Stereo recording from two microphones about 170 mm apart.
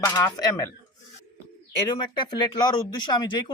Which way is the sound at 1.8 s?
25° left (ahead or behind).